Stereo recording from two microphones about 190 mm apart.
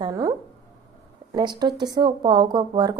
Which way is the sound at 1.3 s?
20° right (ahead or behind).